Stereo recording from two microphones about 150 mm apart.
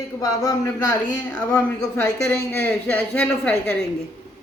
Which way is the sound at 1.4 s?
10° left (ahead or behind).